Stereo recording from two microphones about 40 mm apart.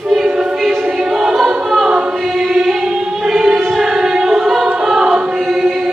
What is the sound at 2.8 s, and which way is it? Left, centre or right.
Singing, centre.